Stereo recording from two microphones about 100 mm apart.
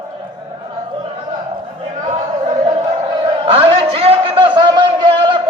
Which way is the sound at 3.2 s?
70° right (ahead or behind).